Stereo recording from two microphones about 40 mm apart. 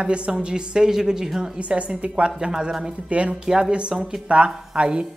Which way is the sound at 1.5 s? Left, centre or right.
Right.